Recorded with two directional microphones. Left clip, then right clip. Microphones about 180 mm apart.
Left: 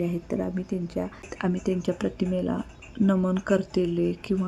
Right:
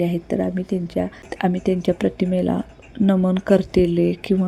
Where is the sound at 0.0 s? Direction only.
15° right (ahead or behind).